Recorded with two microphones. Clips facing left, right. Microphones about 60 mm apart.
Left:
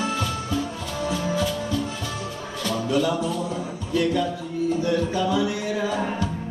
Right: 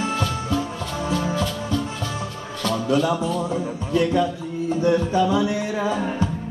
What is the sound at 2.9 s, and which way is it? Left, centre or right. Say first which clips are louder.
Music: right 2 dB; centre.